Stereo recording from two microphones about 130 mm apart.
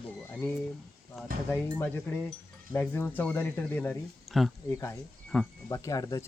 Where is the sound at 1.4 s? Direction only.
15° left (ahead or behind).